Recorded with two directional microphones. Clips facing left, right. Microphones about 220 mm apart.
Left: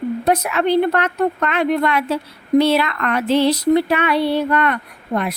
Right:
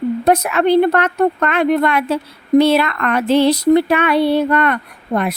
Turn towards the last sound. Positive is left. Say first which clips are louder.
# right 3 dB
turn(degrees=-55)  # may be behind; listen again after turning